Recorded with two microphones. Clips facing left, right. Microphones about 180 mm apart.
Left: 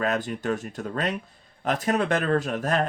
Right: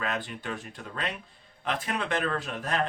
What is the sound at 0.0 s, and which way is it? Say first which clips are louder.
Speech: left 7 dB; 45° left (ahead or behind).